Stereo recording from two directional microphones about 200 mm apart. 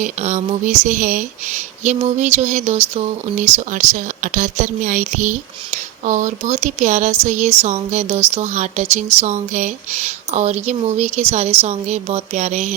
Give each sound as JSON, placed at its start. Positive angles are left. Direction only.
{"t": 0.0, "sound": "speech", "side_deg": -35}